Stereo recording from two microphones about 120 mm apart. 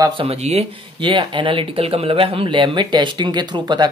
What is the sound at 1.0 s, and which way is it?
Speech, 40° right (ahead or behind).